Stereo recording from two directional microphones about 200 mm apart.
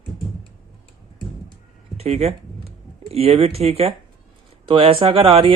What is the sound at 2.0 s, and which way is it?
Speech, 30° right (ahead or behind).